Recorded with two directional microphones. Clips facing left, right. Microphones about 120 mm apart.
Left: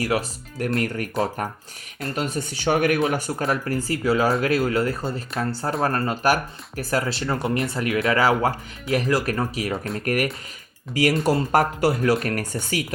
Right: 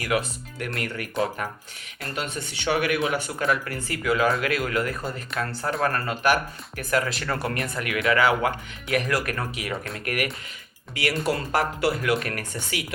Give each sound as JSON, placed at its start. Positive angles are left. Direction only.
{"t": 0.6, "sound": "speech", "side_deg": 40}